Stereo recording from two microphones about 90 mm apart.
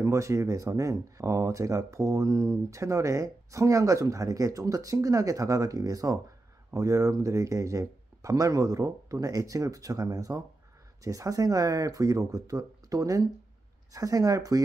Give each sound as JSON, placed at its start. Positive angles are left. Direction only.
{"t": 0.0, "sound": "speech", "side_deg": -35}